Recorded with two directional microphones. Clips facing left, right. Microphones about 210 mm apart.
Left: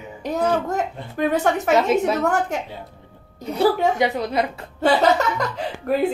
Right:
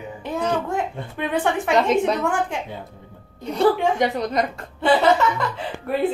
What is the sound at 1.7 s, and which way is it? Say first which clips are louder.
Speech: even; 5° left (ahead or behind).